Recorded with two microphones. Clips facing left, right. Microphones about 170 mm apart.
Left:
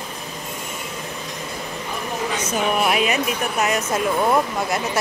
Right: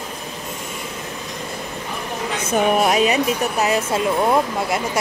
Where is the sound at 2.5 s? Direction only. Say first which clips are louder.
Right 4 dB; 40° right (ahead or behind); by 4.8 s 25° right (ahead or behind).